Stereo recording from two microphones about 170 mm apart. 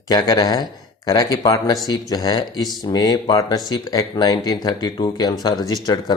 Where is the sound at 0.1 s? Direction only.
20° left (ahead or behind).